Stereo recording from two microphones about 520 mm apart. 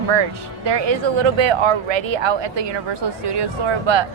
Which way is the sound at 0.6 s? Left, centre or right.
Right.